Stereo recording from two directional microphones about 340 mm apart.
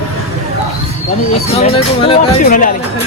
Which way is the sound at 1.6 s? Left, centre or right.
Centre.